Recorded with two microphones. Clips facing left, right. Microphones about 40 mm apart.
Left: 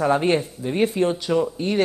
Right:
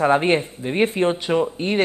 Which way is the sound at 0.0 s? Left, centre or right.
Right.